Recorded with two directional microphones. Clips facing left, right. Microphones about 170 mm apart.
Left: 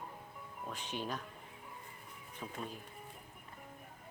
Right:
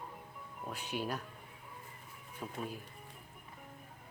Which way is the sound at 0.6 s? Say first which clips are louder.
Right 2 dB; 10° right (ahead or behind).